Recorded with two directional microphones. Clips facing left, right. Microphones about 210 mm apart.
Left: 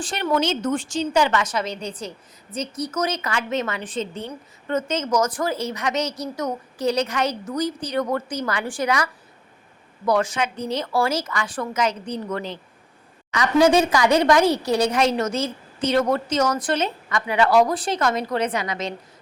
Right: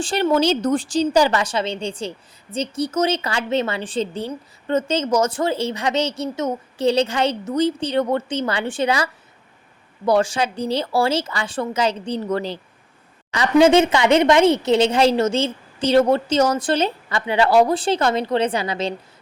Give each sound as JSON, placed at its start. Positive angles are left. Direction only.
{"t": 0.0, "sound": "a woman's voice", "side_deg": -30}
{"t": 10.1, "sound": "a woman's voice", "side_deg": -30}